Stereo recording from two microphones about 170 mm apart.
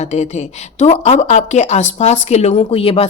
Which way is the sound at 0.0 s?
40° left (ahead or behind).